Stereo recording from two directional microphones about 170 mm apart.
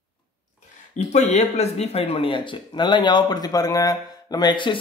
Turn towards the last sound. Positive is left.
turn(degrees=30)  # may be behind; listen again after turning